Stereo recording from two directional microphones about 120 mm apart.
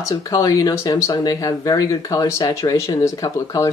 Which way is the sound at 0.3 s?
30° left (ahead or behind).